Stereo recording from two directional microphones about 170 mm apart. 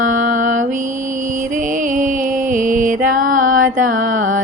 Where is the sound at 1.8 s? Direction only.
50° right (ahead or behind).